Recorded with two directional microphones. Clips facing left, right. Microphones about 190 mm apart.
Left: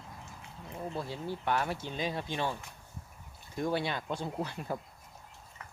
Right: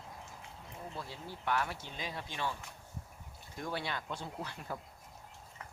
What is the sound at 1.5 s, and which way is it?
Speech, 25° left (ahead or behind).